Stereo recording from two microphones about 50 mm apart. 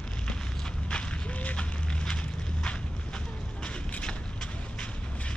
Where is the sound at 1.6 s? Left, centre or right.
Centre.